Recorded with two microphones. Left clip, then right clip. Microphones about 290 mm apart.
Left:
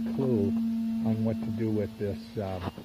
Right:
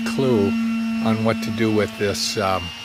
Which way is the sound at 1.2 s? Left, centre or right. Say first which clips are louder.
Right 11 dB; centre.